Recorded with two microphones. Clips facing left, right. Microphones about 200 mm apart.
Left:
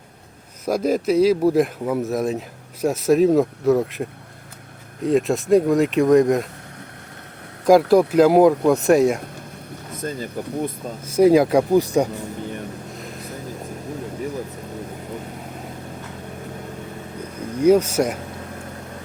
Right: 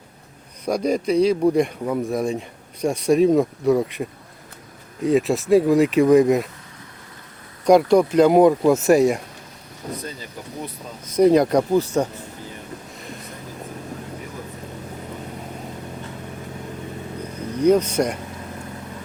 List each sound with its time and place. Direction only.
0.6 s speech: 5° left (ahead or behind)
7.6 s speech: 5° left (ahead or behind)
10.0 s speech: 50° left (ahead or behind)
11.0 s speech: 5° left (ahead or behind)
13.0 s a sound: centre (ahead or behind)
17.6 s speech: 10° left (ahead or behind)